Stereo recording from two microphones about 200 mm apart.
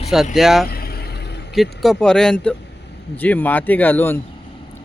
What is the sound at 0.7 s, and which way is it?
Vehicle, 50° left (ahead or behind).